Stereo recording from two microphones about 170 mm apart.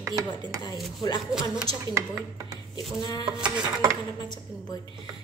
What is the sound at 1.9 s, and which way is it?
Speech, 20° right (ahead or behind).